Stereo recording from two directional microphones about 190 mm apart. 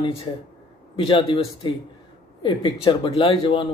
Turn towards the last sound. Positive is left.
turn(degrees=25)  # may be behind; listen again after turning